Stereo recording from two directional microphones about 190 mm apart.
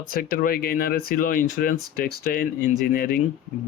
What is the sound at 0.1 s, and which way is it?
Speech, 50° left (ahead or behind).